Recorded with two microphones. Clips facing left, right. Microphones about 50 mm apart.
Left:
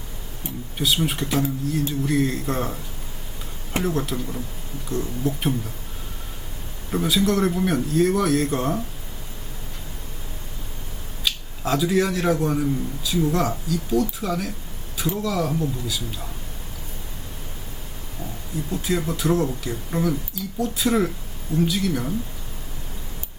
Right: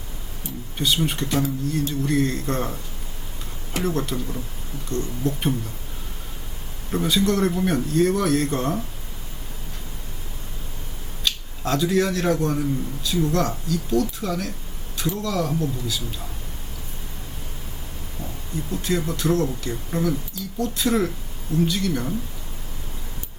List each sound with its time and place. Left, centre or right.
0.4 s speech: left
1.0 s a man's voice: centre
3.8 s a man's voice: centre
6.9 s a man's voice: centre
11.2 s a man's voice: centre
18.7 s a man's voice: centre